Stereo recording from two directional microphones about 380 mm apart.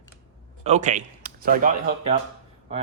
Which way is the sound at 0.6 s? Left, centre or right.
Centre.